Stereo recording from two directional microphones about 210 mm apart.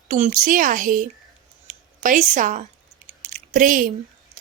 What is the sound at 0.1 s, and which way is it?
Speech, 40° right (ahead or behind).